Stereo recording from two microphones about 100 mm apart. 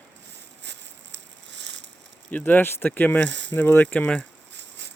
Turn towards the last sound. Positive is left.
turn(degrees=10)  # may be behind; listen again after turning